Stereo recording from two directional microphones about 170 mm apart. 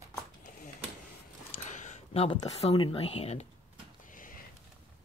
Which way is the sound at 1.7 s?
45° left (ahead or behind).